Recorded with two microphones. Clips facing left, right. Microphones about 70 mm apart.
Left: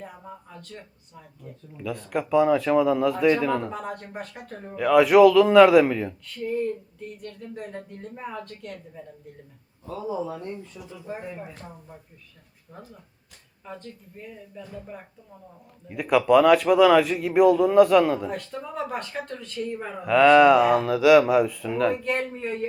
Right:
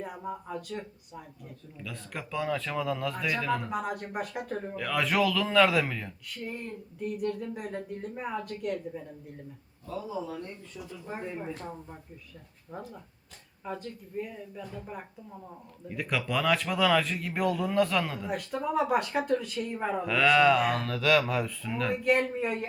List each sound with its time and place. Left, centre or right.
0.0 s speech: centre
1.8 s speech: centre
3.7 s speech: centre
7.2 s speech: centre
9.8 s speech: left
11.1 s speech: centre
13.7 s speech: centre
15.9 s speech: centre
18.3 s speech: centre
20.0 s speech: centre
22.0 s speech: centre